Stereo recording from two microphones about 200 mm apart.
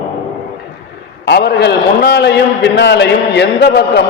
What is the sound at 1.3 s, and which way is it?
A man's voice, 55° left (ahead or behind).